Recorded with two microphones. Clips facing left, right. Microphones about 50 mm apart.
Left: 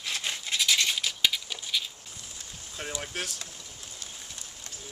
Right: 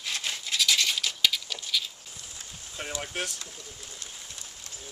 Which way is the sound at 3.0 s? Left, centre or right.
Centre.